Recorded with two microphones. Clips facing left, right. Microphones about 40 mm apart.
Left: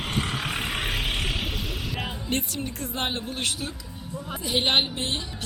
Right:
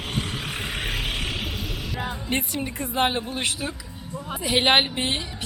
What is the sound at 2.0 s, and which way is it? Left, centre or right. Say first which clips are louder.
A woman's voice: right 3 dB; centre.